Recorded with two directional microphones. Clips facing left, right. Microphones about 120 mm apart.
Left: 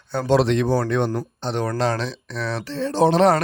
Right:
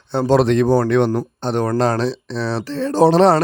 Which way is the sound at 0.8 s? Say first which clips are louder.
Right 6 dB; 75° right (ahead or behind).